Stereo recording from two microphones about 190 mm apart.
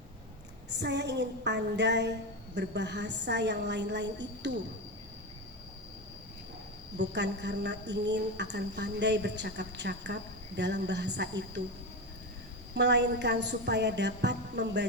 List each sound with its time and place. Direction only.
0.7 s a woman's voice: 65° right (ahead or behind)
7.0 s a woman's voice: 65° right (ahead or behind)
12.7 s a woman's voice: 65° right (ahead or behind)